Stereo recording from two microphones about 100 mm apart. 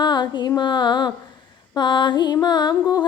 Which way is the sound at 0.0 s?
45° left (ahead or behind).